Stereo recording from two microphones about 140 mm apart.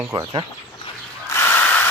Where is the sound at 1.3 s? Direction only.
20° left (ahead or behind).